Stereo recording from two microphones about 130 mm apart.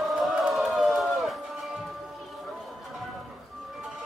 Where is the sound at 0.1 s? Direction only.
5° right (ahead or behind).